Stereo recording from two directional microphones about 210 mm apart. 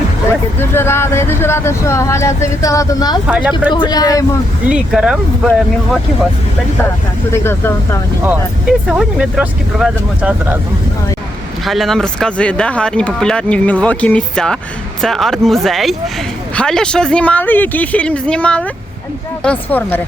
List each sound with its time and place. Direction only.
0.6 s speech: 10° left (ahead or behind)
3.2 s speech: 5° right (ahead or behind)
3.7 s speech: 20° left (ahead or behind)
4.7 s speech: 5° right (ahead or behind)
7.3 s speech: 10° left (ahead or behind)
8.9 s speech: 5° right (ahead or behind)
11.6 s speech: centre (ahead or behind)